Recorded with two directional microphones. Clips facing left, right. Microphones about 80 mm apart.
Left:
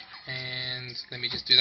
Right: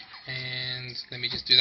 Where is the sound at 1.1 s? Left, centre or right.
Left.